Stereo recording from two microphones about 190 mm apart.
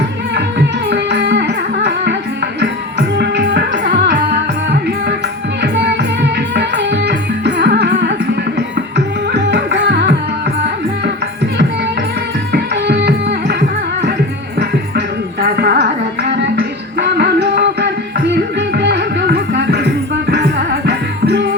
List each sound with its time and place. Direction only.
0.9 s music: 65° right (ahead or behind)
5.7 s music: 65° right (ahead or behind)
9.3 s music: 65° right (ahead or behind)
12.5 s music: 60° right (ahead or behind)